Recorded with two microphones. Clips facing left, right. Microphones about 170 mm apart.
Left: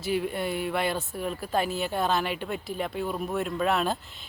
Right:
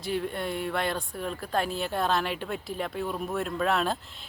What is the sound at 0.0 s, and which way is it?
Speech, 5° left (ahead or behind).